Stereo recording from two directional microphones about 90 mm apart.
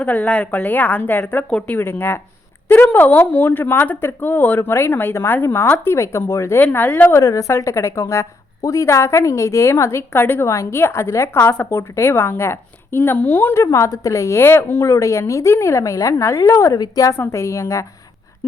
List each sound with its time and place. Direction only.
0.0 s speech: 15° left (ahead or behind)
1.8 s speech: 25° left (ahead or behind)
7.2 s a woman's voice: 35° left (ahead or behind)
16.7 s a woman's voice: 45° left (ahead or behind)
17.1 s a woman's voice: 30° left (ahead or behind)